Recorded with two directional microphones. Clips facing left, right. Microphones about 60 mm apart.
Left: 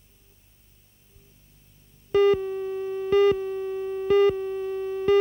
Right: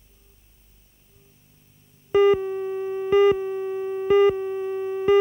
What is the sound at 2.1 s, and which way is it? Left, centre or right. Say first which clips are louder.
Busy signal: right 2 dB; centre.